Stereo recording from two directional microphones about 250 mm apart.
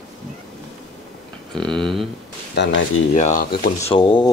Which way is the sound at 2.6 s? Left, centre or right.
Left.